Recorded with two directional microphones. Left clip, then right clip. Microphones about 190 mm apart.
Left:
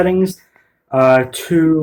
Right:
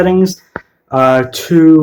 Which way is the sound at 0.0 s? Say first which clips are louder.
Right 4 dB; 10° right (ahead or behind).